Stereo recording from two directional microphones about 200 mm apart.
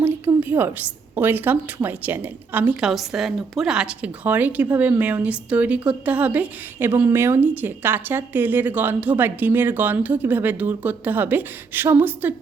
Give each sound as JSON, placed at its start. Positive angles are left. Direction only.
{"t": 0.0, "sound": "a woman's voice", "side_deg": -10}